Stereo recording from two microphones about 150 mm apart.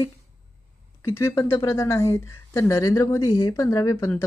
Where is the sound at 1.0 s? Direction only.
20° left (ahead or behind).